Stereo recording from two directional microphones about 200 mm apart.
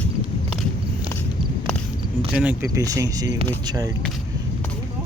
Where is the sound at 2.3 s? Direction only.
5° right (ahead or behind).